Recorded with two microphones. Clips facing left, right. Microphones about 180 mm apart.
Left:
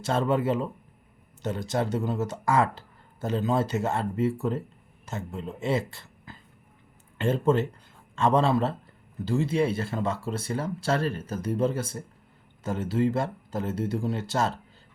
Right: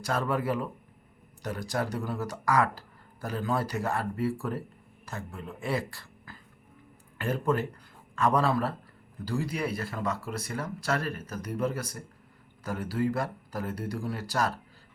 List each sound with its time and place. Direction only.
0.0 s speech: 25° left (ahead or behind)